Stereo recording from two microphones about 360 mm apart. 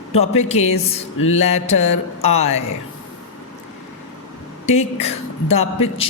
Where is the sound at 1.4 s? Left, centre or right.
Centre.